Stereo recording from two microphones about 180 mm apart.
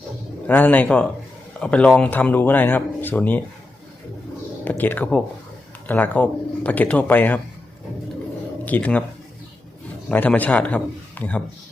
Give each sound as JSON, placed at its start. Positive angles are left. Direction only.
{"t": 0.4, "sound": "speech", "side_deg": 10}
{"t": 4.6, "sound": "speech", "side_deg": 10}
{"t": 8.6, "sound": "speech", "side_deg": 10}
{"t": 10.1, "sound": "speech", "side_deg": 10}